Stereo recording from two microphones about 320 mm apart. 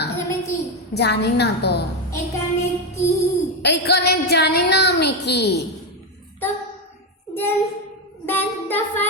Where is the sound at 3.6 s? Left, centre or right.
Left.